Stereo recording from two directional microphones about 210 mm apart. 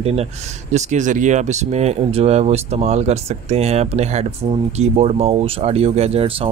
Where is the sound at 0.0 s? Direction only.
30° right (ahead or behind).